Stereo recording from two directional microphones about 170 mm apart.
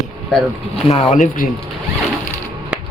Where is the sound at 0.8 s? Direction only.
40° left (ahead or behind).